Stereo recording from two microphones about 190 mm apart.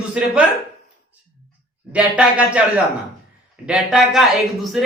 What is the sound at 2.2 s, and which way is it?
Speech, 5° right (ahead or behind).